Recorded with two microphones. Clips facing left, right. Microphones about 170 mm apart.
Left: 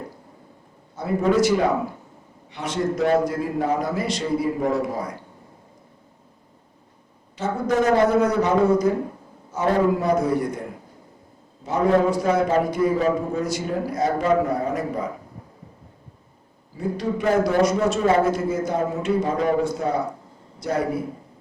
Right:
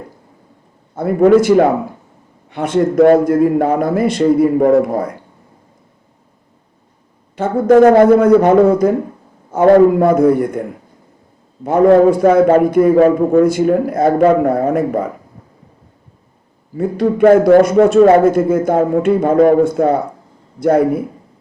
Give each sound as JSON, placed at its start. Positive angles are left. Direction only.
{"t": 0.9, "sound": "a man's voice", "side_deg": -55}
{"t": 7.3, "sound": "a man's voice", "side_deg": -55}
{"t": 11.6, "sound": "a man's voice", "side_deg": -55}
{"t": 16.7, "sound": "a man's voice", "side_deg": -55}